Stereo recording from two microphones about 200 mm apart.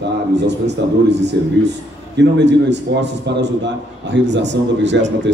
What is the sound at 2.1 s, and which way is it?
A man's voice, 60° right (ahead or behind).